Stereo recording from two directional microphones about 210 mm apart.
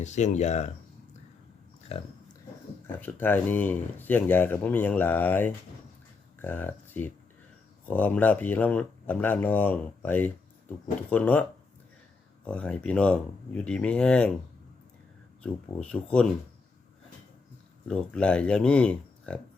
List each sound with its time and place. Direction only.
0.0 s speech: 35° left (ahead or behind)
1.9 s speech: 30° left (ahead or behind)
2.8 s speech: 10° left (ahead or behind)
12.5 s speech: 5° left (ahead or behind)
15.4 s speech: 5° left (ahead or behind)
17.8 s speech: 5° left (ahead or behind)